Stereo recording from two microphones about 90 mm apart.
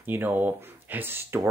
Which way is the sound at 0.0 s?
20° right (ahead or behind).